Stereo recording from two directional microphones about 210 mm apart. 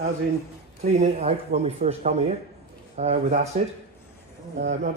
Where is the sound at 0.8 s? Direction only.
30° right (ahead or behind).